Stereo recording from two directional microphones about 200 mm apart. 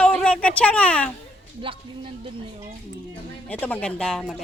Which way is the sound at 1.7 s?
25° right (ahead or behind).